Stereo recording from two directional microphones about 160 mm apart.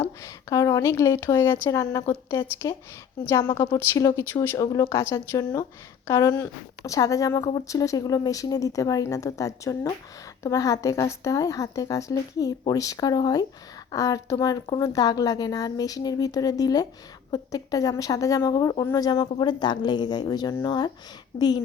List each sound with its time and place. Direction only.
0.2 s speech: 20° left (ahead or behind)